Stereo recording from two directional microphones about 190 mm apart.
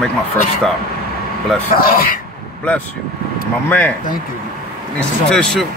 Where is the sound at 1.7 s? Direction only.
50° left (ahead or behind).